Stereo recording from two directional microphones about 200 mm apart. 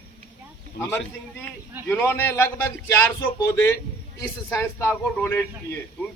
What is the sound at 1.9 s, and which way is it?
A man's voice, 10° left (ahead or behind).